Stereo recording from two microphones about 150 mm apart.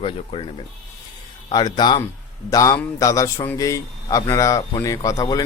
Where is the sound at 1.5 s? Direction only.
30° left (ahead or behind).